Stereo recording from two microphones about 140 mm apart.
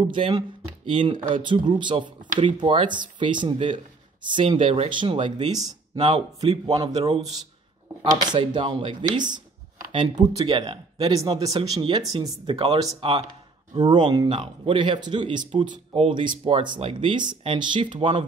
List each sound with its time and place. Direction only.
0.0 s speech: 35° right (ahead or behind)
6.0 s speech: 40° right (ahead or behind)
8.1 s speech: 30° right (ahead or behind)